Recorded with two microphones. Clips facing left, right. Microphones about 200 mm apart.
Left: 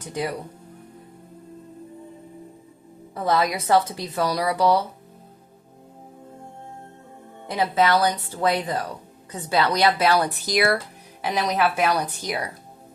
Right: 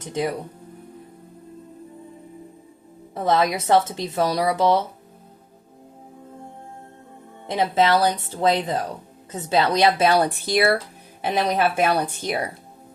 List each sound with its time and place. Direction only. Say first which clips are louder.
3.2 s a woman's voice: right 2 dB; 25° right (ahead or behind)
7.5 s a woman's voice: right 1 dB; 25° right (ahead or behind)